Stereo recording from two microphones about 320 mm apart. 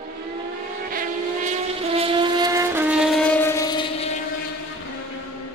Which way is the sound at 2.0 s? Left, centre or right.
Centre.